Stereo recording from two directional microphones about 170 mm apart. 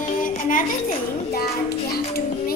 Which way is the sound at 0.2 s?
50° left (ahead or behind).